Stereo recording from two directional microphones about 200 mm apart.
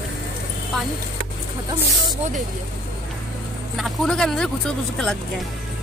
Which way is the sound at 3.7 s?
Centre (ahead or behind).